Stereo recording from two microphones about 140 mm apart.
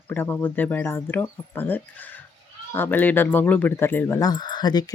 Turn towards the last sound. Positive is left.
turn(degrees=30)  # may be behind; listen again after turning